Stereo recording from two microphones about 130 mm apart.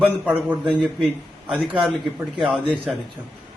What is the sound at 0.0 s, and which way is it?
A man's voice, 10° right (ahead or behind).